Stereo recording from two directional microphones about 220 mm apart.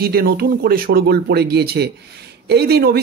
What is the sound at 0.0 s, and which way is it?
Speech, 45° right (ahead or behind).